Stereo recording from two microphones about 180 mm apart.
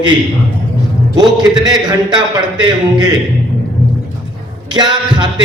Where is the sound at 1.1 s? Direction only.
25° right (ahead or behind).